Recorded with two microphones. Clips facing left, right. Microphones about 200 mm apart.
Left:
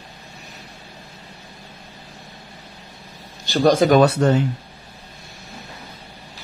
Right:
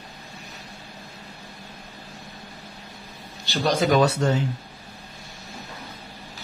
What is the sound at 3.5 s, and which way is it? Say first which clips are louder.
Speech: left 6 dB; 50° left (ahead or behind).